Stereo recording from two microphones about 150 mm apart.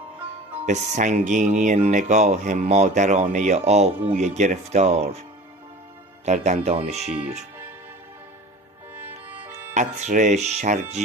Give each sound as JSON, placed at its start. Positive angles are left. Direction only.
{"t": 0.6, "sound": "speech", "side_deg": -55}
{"t": 6.2, "sound": "speech", "side_deg": -50}
{"t": 9.0, "sound": "music", "side_deg": -15}
{"t": 9.7, "sound": "speech", "side_deg": -55}